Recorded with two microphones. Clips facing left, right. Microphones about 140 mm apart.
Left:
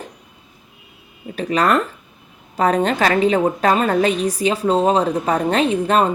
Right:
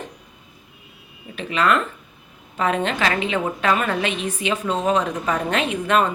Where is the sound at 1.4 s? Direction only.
40° left (ahead or behind).